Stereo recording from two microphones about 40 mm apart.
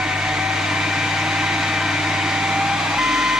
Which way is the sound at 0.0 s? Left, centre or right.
Centre.